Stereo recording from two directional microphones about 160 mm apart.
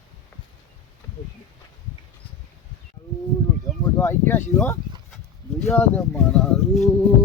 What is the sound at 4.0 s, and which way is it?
Speech, 15° left (ahead or behind).